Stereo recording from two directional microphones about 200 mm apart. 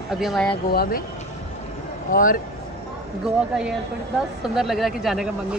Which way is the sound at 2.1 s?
45° left (ahead or behind).